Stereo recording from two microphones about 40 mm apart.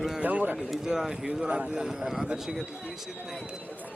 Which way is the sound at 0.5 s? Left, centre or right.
Centre.